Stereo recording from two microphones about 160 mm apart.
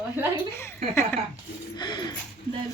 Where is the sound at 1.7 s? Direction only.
30° left (ahead or behind).